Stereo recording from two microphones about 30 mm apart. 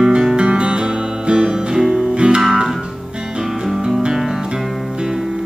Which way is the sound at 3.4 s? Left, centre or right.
Centre.